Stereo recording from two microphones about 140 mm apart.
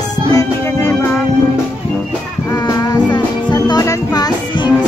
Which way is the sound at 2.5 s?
25° left (ahead or behind).